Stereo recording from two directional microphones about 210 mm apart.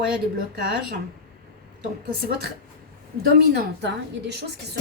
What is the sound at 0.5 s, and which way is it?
Speech, 50° right (ahead or behind).